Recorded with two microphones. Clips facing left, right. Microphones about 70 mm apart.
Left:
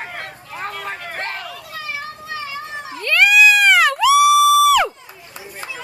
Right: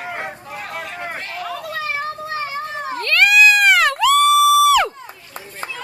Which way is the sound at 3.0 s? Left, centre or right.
Centre.